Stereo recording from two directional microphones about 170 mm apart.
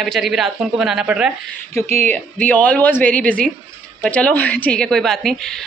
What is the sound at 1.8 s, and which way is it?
Speech, 40° right (ahead or behind).